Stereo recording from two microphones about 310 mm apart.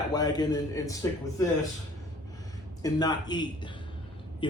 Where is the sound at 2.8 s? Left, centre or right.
Centre.